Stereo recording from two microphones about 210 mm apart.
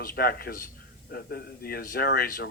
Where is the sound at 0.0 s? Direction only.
45° left (ahead or behind).